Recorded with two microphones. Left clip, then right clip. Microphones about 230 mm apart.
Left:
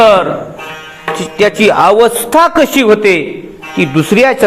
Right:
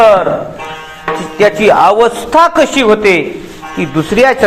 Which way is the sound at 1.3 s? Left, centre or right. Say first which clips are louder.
Right 1 dB; left.